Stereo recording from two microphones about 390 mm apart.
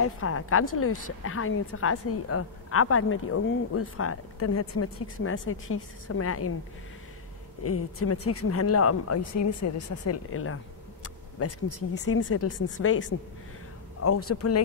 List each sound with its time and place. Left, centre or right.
0.0 s a woman's voice: left
7.6 s a woman's voice: left
14.0 s a woman's voice: left